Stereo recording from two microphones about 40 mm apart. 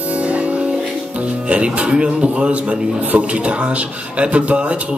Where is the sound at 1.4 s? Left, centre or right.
Right.